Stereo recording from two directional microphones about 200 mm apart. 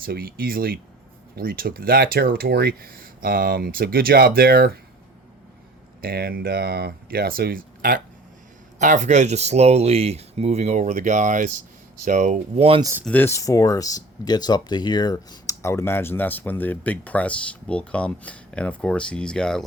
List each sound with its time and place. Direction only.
0.0 s speech: 50° right (ahead or behind)
6.0 s speech: 50° right (ahead or behind); by 12.8 s 30° right (ahead or behind)
12.8 s speech: 10° right (ahead or behind)
13.1 s speech: 10° left (ahead or behind)